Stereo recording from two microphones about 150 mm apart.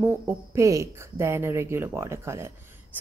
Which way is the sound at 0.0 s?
15° right (ahead or behind).